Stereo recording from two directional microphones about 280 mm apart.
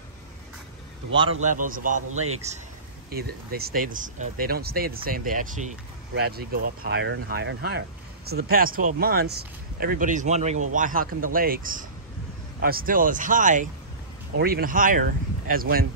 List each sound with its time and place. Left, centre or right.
1.4 s speech: right